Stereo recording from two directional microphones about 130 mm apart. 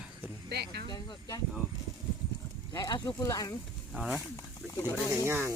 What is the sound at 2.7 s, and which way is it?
Speech, 30° left (ahead or behind).